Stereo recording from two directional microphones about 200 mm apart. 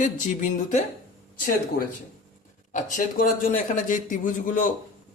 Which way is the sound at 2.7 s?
40° left (ahead or behind).